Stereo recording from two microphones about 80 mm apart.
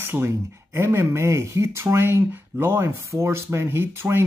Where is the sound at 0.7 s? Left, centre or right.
Right.